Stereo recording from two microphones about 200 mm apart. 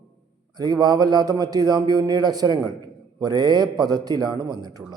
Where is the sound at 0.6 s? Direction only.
20° right (ahead or behind).